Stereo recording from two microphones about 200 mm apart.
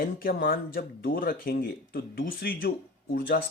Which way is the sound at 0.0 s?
50° left (ahead or behind).